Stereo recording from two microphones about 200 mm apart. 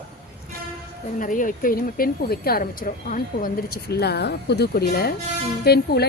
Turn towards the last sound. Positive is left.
turn(degrees=55)  # may be behind; listen again after turning